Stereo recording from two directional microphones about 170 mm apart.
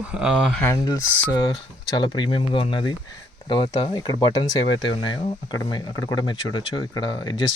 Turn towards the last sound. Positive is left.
turn(degrees=25)  # may be behind; listen again after turning